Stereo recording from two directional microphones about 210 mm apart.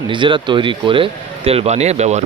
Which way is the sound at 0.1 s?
25° right (ahead or behind).